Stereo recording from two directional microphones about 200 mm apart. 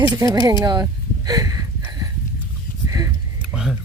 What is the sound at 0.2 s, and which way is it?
Speech, 15° right (ahead or behind).